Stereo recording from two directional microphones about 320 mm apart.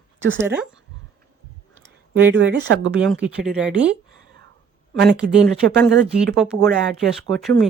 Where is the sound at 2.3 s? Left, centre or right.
Right.